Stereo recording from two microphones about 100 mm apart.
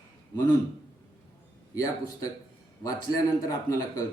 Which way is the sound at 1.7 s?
35° left (ahead or behind).